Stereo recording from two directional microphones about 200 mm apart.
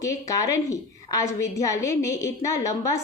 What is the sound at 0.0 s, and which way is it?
A woman's voice, 15° left (ahead or behind).